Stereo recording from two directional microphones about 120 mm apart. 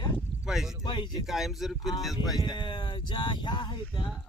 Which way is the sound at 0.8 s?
40° left (ahead or behind).